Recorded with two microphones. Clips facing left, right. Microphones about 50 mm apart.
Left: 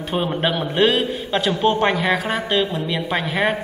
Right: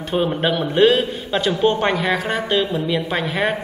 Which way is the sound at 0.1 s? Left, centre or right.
Centre.